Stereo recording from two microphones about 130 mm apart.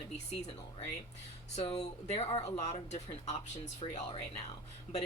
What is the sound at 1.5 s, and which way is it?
Speech, 55° left (ahead or behind).